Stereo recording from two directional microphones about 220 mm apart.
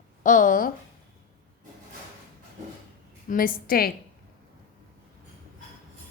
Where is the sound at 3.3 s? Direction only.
40° left (ahead or behind).